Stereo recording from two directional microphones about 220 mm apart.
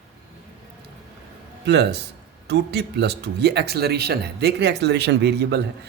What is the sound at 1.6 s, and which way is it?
Speech, 50° right (ahead or behind).